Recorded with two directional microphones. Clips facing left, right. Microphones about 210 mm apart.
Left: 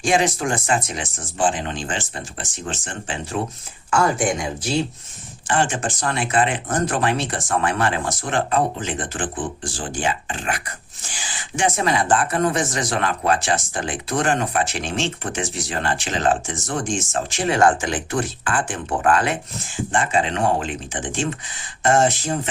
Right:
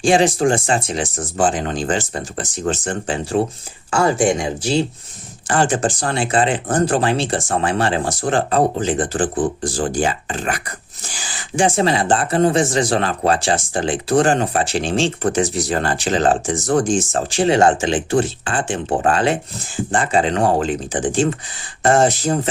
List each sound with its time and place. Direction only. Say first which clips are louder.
0.0 s speech: right 5 dB; 30° right (ahead or behind)